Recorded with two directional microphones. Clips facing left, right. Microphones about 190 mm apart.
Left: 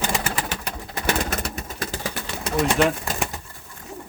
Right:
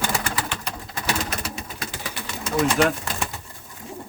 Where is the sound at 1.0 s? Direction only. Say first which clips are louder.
Left 3 dB; 50° left (ahead or behind).